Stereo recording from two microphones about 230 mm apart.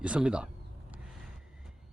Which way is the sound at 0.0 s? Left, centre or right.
Centre.